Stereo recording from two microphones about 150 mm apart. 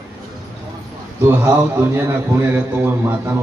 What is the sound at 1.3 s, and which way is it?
A man's voice, 15° right (ahead or behind).